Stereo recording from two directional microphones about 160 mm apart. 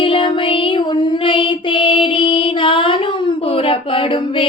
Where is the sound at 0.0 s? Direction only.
35° left (ahead or behind).